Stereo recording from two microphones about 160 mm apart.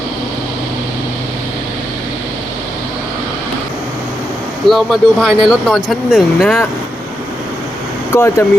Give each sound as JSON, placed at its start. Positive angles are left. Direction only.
{"t": 4.7, "sound": "speech", "side_deg": 0}
{"t": 8.1, "sound": "speech", "side_deg": 15}